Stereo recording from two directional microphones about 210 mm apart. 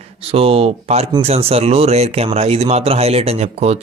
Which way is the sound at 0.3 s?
25° right (ahead or behind).